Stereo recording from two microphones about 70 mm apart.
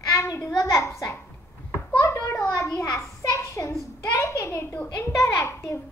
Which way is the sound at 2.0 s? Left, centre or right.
Left.